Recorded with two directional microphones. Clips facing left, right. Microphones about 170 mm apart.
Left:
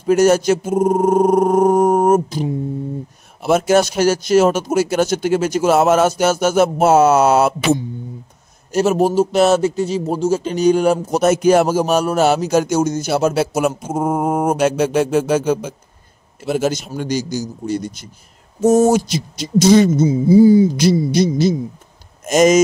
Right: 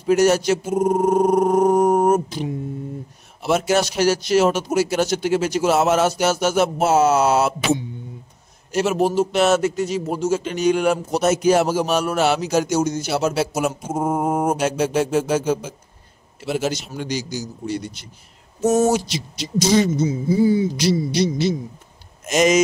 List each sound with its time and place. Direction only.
0.0 s a sound: 50° left (ahead or behind)
3.4 s a man's voice: 50° left (ahead or behind)
8.7 s a man's voice: 40° left (ahead or behind); by 15.7 s 60° left (ahead or behind)
16.3 s a man's voice: 45° left (ahead or behind)
20.1 s speech: 35° left (ahead or behind)
20.7 s a man's voice: 50° left (ahead or behind)